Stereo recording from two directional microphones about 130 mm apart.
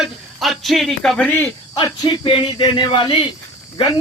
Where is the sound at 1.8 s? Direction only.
35° left (ahead or behind).